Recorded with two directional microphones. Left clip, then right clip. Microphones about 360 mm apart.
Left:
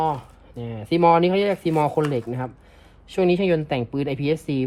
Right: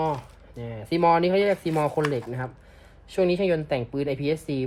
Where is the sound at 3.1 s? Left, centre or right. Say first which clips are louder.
Left 3 dB; centre.